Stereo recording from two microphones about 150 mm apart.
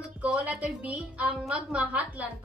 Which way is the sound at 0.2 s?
5° right (ahead or behind).